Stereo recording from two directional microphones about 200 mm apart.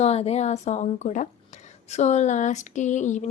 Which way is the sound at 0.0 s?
30° left (ahead or behind).